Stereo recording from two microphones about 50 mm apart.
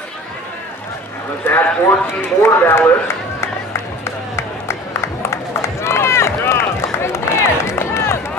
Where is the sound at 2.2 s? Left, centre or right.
Left.